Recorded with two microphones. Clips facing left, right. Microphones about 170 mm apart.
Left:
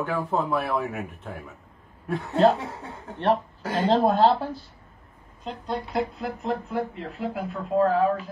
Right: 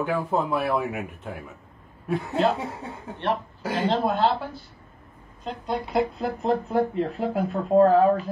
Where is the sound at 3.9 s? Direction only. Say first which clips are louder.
Left 5 dB; 35° left (ahead or behind).